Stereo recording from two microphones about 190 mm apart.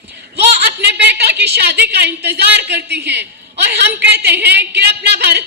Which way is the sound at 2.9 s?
60° right (ahead or behind).